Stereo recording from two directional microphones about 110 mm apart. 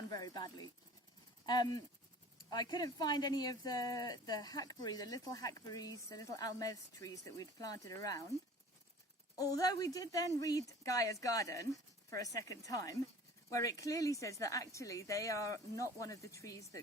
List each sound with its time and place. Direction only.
0.1 s speech: 35° left (ahead or behind)
9.3 s a woman's voice: 30° left (ahead or behind)